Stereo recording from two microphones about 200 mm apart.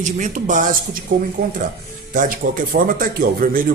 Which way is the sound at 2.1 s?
40° right (ahead or behind).